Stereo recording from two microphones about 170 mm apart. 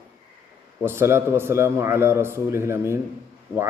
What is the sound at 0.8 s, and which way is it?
A man's voice, 15° right (ahead or behind).